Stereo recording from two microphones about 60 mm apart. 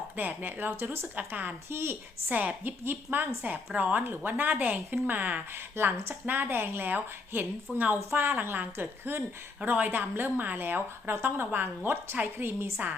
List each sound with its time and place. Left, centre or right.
0.2 s a woman's voice: right
5.5 s a woman's voice: right
9.6 s a woman's voice: right